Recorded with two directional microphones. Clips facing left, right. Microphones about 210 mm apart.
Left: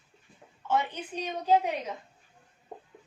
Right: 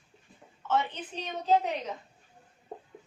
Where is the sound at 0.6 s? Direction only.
10° left (ahead or behind).